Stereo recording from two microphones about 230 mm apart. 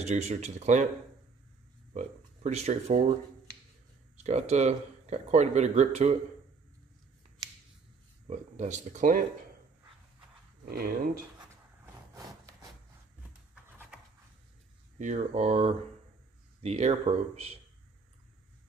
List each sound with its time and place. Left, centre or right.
0.0 s speech: right
2.0 s speech: right
4.2 s speech: right
8.3 s speech: right
10.6 s speech: right
15.0 s speech: right